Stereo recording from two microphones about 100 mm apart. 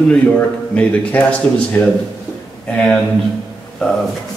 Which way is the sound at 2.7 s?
10° left (ahead or behind).